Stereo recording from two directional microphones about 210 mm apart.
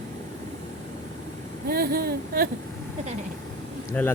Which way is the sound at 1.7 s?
45° right (ahead or behind).